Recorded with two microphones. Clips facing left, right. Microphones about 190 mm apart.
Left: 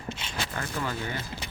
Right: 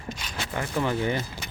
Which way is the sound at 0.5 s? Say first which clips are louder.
Right 8 dB; 20° right (ahead or behind).